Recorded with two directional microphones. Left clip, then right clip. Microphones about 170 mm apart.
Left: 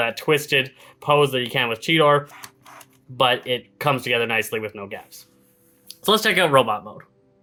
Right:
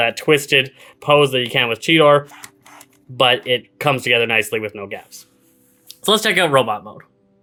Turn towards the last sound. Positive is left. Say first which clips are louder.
# right 1 dB
turn(degrees=-25)  # may be behind; listen again after turning